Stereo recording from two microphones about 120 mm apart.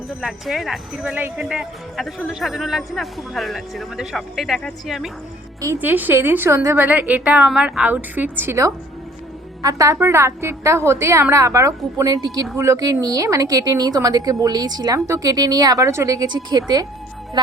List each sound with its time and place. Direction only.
0.2 s speech: centre (ahead or behind)
5.8 s a woman's voice: 15° right (ahead or behind); by 17.5 s 40° right (ahead or behind)